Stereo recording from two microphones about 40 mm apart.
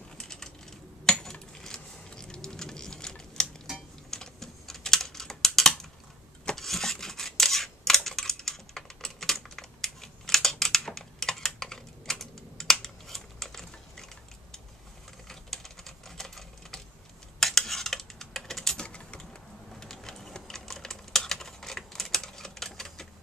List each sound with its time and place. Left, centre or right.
0.2 s a sound: centre
1.0 s coin: centre
2.0 s typing: centre
6.5 s scissors: centre
15.2 s typing: centre
18.8 s typing: left
19.7 s a sound: centre
20.3 s typing: centre